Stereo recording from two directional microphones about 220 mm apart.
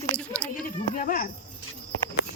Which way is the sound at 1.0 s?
40° left (ahead or behind).